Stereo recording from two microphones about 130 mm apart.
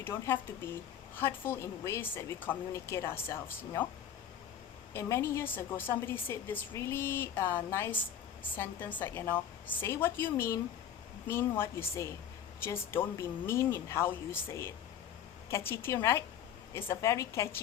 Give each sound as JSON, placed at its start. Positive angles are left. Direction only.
{"t": 0.0, "sound": "a woman's voice", "side_deg": 20}
{"t": 4.9, "sound": "a woman's voice", "side_deg": 20}